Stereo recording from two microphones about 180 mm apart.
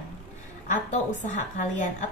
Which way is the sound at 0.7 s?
45° left (ahead or behind).